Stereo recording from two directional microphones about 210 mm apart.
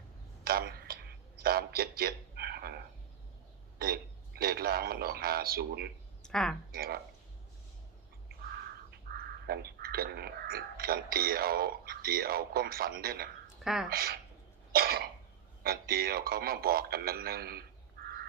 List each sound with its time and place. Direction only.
0.4 s a sound: 45° right (ahead or behind)
3.8 s speech: 45° right (ahead or behind)
6.2 s speech: centre (ahead or behind)
6.7 s speech: 45° right (ahead or behind)
8.4 s a sound: 45° right (ahead or behind)
13.9 s speech: 45° right (ahead or behind)
14.7 s cough: 45° right (ahead or behind)
15.6 s speech: 45° right (ahead or behind)